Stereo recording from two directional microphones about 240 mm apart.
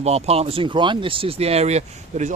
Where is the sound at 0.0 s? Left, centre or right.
Right.